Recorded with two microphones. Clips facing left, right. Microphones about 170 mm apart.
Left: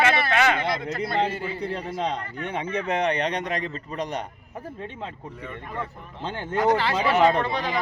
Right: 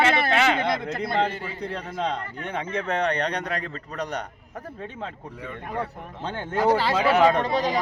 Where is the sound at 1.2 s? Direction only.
10° left (ahead or behind).